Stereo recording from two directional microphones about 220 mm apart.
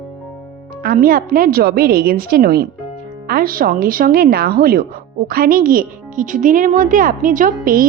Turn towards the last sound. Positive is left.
turn(degrees=-40)  # may be behind; listen again after turning